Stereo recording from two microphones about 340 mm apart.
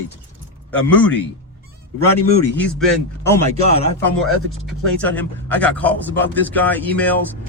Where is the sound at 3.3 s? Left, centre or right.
Centre.